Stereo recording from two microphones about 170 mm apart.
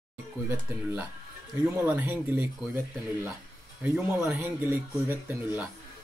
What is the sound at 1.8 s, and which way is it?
Speech, 10° right (ahead or behind).